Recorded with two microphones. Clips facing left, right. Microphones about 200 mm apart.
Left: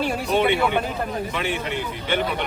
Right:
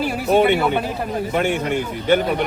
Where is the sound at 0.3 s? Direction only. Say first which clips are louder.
Right 5 dB; 45° right (ahead or behind).